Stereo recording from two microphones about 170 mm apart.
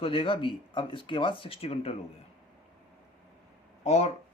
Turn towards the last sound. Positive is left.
turn(degrees=40)  # may be behind; listen again after turning